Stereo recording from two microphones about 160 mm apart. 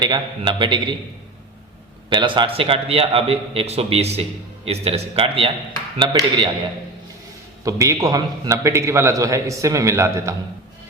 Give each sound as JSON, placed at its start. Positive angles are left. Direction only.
{"t": 0.0, "sound": "a man's voice", "side_deg": -30}
{"t": 2.0, "sound": "a man's voice", "side_deg": -30}
{"t": 7.6, "sound": "a man's voice", "side_deg": -20}